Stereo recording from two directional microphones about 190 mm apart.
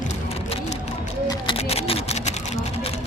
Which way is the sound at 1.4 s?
30° left (ahead or behind).